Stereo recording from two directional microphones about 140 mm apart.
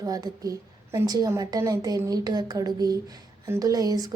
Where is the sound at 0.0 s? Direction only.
25° right (ahead or behind).